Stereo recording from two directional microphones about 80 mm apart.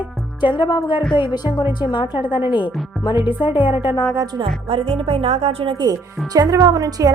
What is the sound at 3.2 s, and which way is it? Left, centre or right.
Speech, right.